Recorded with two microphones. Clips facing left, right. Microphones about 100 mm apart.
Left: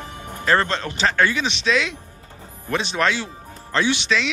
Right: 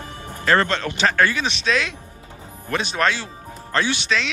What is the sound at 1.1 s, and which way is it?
Speech, 20° left (ahead or behind).